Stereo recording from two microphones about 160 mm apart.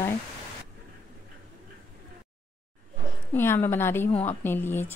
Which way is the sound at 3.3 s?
15° left (ahead or behind).